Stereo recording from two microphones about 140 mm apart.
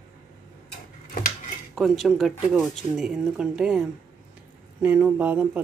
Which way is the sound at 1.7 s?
Centre (ahead or behind).